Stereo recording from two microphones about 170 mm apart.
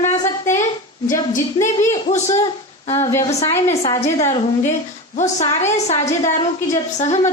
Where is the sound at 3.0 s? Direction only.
20° left (ahead or behind).